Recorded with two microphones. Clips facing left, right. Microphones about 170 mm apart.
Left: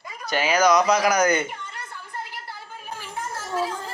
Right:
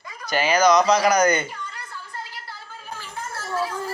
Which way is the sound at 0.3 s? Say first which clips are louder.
Right 1 dB; centre (ahead or behind).